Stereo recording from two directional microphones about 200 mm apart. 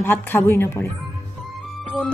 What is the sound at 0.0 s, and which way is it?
Speech, 10° left (ahead or behind).